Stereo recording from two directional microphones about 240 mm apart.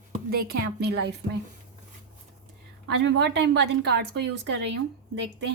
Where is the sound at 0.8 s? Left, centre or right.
Right.